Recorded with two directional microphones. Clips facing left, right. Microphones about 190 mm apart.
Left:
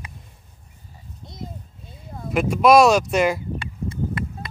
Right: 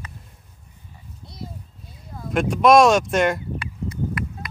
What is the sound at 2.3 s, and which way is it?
Speech, centre (ahead or behind).